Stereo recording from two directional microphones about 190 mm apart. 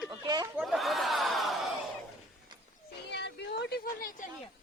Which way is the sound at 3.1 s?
65° left (ahead or behind).